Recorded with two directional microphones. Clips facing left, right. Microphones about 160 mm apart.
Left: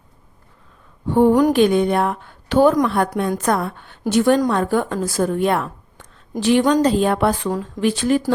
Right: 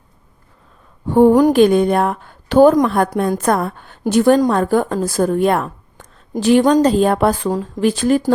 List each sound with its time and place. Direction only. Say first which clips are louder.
1.3 s a woman's voice: right 3 dB; 25° right (ahead or behind)
1.5 s a woman's voice: right 3 dB; 45° right (ahead or behind)